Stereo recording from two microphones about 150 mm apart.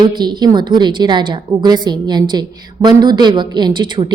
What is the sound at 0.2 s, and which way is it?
A woman's voice, 30° right (ahead or behind).